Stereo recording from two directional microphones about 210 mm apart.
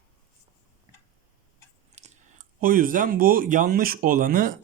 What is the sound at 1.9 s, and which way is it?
Speech, 35° right (ahead or behind).